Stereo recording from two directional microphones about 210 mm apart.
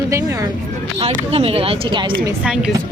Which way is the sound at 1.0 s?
30° right (ahead or behind).